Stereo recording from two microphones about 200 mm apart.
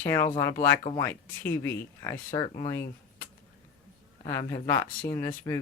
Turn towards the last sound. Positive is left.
turn(degrees=15)  # may be behind; listen again after turning